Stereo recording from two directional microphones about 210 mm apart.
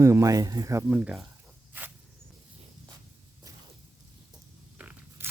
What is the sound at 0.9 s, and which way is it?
Speech, 5° right (ahead or behind).